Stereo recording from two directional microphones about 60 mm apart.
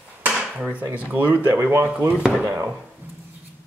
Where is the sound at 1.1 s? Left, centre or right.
Right.